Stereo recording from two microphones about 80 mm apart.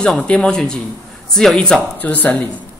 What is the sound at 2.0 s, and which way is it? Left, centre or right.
Speech, centre.